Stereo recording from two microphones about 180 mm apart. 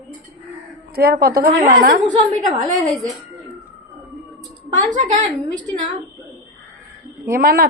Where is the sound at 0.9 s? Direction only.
55° right (ahead or behind).